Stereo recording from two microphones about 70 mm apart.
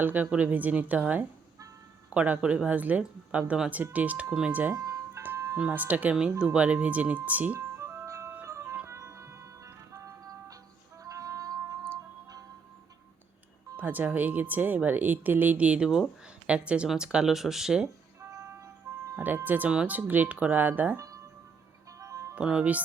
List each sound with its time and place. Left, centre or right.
0.0 s speech: right
4.7 s ice cream truck: right
5.5 s speech: right
7.6 s music: right
8.0 s music: right
13.7 s speech: right; by 17.8 s centre
18.2 s music: right
19.1 s speech: right
21.9 s music: right
22.4 s speech: centre